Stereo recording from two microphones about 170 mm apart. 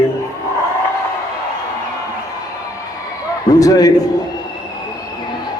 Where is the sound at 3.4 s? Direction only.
20° left (ahead or behind).